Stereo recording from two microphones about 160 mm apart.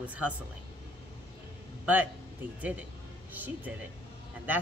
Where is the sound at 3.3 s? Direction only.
10° right (ahead or behind).